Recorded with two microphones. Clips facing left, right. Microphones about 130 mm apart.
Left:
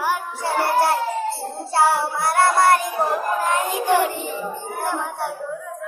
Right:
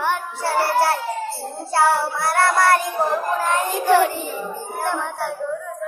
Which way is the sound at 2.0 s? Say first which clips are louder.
Left 1 dB; 20° left (ahead or behind).